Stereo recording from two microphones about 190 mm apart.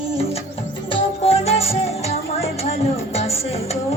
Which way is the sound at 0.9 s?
30° left (ahead or behind).